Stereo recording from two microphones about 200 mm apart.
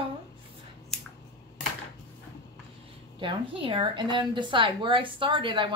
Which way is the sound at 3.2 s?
25° right (ahead or behind).